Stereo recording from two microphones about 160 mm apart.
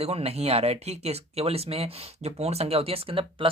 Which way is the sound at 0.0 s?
40° right (ahead or behind).